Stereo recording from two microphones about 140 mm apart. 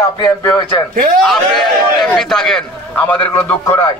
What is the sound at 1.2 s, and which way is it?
A man's voice, centre (ahead or behind).